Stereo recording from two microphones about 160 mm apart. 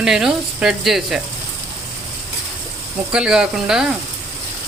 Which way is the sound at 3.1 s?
5° right (ahead or behind).